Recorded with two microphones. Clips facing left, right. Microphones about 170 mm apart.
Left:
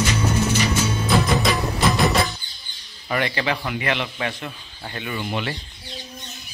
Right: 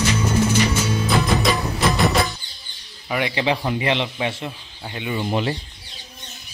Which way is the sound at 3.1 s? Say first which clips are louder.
Right 1 dB; 10° right (ahead or behind).